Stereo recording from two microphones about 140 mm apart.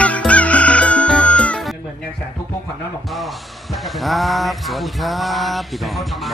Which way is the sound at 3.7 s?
Centre (ahead or behind).